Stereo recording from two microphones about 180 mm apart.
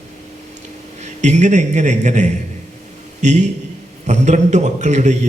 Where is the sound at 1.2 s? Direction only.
40° right (ahead or behind).